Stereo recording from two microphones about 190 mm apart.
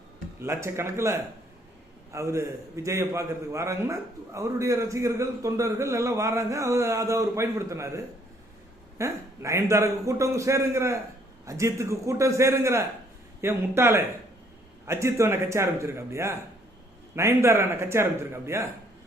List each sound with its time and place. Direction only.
0.3 s a man's voice: 15° right (ahead or behind)